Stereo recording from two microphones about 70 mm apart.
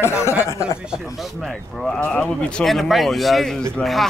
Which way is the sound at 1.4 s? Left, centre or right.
Centre.